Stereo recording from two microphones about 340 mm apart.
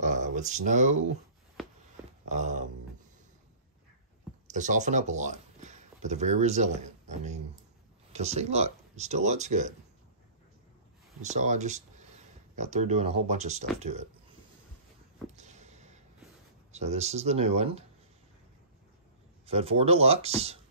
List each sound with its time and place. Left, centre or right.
0.0 s a sound: right
2.2 s speech: right
4.5 s speech: right
11.2 s speech: centre
15.3 s a sound: centre
16.7 s speech: centre
19.4 s speech: centre